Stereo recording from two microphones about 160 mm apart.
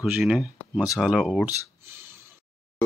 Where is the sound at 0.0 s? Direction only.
5° right (ahead or behind).